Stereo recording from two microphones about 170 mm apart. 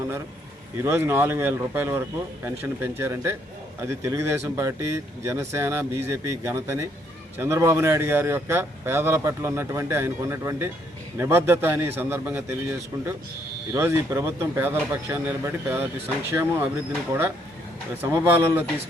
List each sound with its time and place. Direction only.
0.9 s speech: 15° right (ahead or behind)
13.7 s speech: 15° right (ahead or behind)